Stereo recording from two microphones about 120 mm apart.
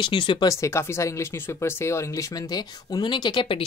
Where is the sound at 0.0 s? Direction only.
40° left (ahead or behind).